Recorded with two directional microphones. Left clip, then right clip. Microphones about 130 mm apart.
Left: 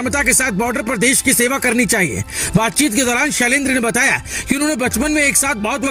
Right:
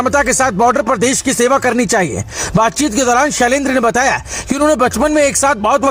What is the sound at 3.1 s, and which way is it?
Speech, 55° left (ahead or behind).